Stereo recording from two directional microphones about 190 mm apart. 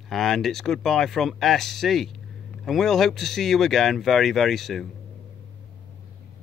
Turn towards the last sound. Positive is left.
turn(degrees=0)  # may be behind; listen again after turning